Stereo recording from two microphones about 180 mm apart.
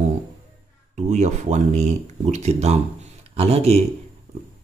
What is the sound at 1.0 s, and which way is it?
Speech, 40° right (ahead or behind).